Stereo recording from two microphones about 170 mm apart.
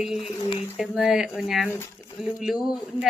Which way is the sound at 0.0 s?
Centre (ahead or behind).